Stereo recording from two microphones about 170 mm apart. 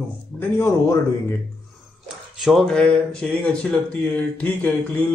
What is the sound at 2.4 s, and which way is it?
Speech, centre (ahead or behind).